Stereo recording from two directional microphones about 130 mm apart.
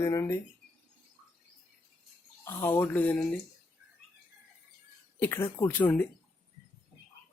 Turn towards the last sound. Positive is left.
turn(degrees=10)  # may be behind; listen again after turning